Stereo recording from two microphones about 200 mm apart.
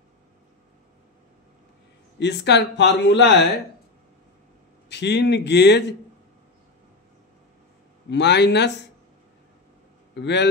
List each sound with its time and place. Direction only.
2.1 s a man's voice: 60° left (ahead or behind)
4.8 s a man's voice: 60° left (ahead or behind)
8.1 s a man's voice: 60° left (ahead or behind)
10.1 s a man's voice: 60° left (ahead or behind)